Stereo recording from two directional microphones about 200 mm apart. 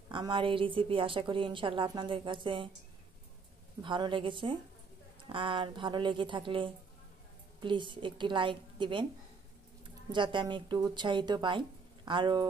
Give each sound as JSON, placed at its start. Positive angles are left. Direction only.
{"t": 0.1, "sound": "a woman's voice", "side_deg": -25}
{"t": 3.8, "sound": "a woman's voice", "side_deg": -25}
{"t": 10.1, "sound": "a woman's voice", "side_deg": -25}